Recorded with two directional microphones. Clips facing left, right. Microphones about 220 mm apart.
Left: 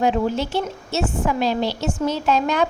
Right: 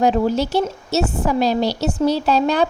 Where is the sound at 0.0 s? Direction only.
40° right (ahead or behind).